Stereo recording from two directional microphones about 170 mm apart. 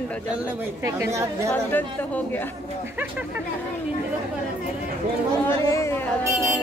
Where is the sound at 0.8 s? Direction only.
15° right (ahead or behind).